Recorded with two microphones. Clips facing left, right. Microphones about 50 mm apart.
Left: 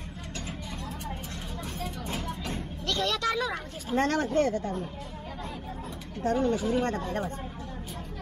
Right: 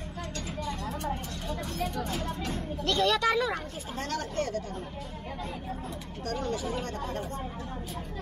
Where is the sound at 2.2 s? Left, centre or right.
Centre.